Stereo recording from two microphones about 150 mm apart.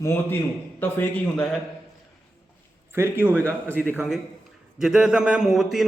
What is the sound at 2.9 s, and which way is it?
A man's voice, 15° right (ahead or behind).